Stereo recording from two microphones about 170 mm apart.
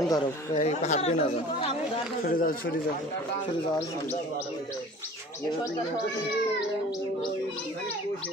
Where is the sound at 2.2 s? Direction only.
55° left (ahead or behind).